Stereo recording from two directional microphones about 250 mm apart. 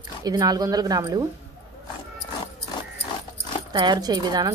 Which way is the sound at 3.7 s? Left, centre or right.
Centre.